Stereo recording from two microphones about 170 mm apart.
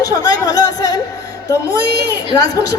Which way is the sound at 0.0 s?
20° left (ahead or behind).